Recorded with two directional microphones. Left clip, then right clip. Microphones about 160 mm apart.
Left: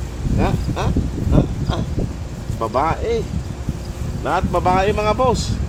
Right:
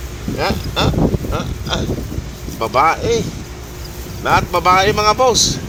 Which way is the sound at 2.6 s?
5° left (ahead or behind).